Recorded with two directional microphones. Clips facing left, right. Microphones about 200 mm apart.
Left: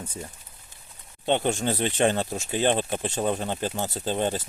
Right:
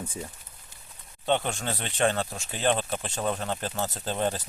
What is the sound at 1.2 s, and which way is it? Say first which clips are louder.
Speech: left 3 dB; 20° left (ahead or behind).